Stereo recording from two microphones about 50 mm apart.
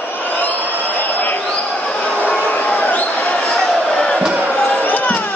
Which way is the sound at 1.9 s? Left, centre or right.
Centre.